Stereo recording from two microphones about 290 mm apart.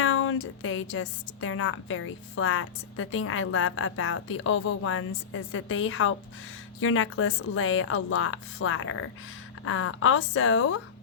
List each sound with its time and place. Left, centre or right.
0.0 s a woman's voice: left